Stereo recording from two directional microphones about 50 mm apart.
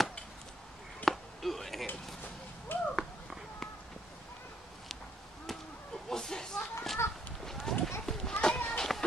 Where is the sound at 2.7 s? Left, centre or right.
Left.